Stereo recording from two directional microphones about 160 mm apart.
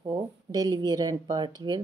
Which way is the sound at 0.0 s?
25° right (ahead or behind).